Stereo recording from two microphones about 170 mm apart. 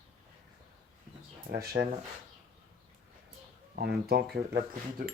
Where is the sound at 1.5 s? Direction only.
65° right (ahead or behind).